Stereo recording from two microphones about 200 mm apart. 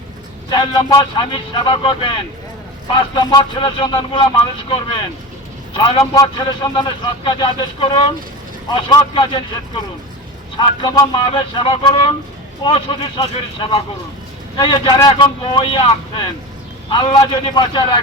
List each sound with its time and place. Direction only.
0.5 s a man's voice: 20° left (ahead or behind)
10.6 s a man's voice: 20° left (ahead or behind)